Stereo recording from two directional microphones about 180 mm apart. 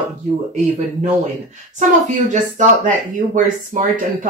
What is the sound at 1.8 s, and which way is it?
Speech, 45° right (ahead or behind).